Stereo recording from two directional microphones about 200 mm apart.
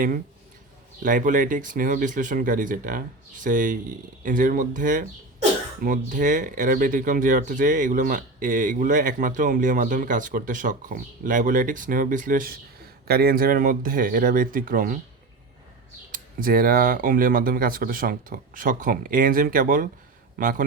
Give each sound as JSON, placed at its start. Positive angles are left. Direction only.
{"t": 1.0, "sound": "speech", "side_deg": -40}
{"t": 16.1, "sound": "speech", "side_deg": -45}